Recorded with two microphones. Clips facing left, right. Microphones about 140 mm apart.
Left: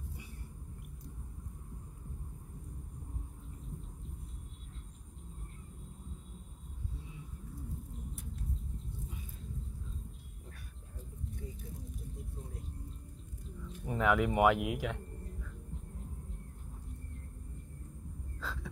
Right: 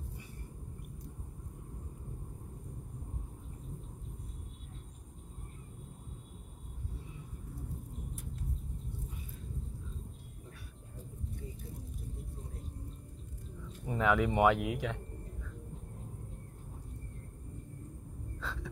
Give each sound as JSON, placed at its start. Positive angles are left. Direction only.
{"t": 13.8, "sound": "speech", "side_deg": 0}
{"t": 18.4, "sound": "frog", "side_deg": 0}